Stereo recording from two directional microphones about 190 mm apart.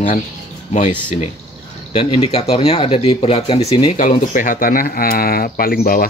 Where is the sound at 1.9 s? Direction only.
35° left (ahead or behind).